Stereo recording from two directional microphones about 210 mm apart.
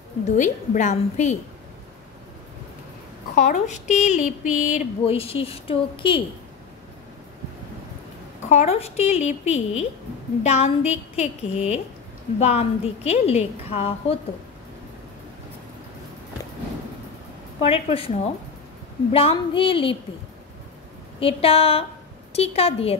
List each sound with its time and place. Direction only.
0.4 s speech: 35° left (ahead or behind)
3.3 s speech: 35° left (ahead or behind)
8.5 s a woman's voice: 30° left (ahead or behind)
17.6 s a woman's voice: 30° left (ahead or behind)
21.2 s a woman's voice: 25° left (ahead or behind)